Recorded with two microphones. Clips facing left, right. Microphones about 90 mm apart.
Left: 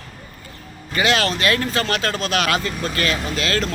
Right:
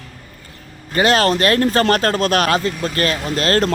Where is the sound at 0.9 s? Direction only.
40° right (ahead or behind).